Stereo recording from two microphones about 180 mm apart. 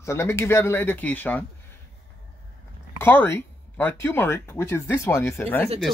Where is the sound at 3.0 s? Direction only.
10° left (ahead or behind).